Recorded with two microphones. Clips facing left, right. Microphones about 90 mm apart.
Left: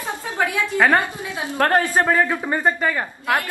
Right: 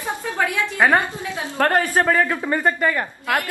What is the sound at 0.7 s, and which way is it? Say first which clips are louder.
Speech: even; 20° right (ahead or behind).